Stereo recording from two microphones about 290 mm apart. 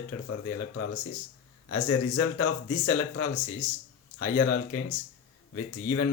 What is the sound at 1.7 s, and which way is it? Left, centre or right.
Speech, left.